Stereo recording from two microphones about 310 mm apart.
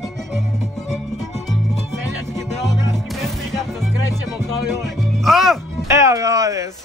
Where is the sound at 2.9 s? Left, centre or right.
Centre.